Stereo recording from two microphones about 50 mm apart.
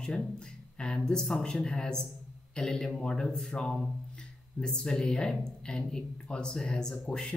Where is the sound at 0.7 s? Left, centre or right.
Centre.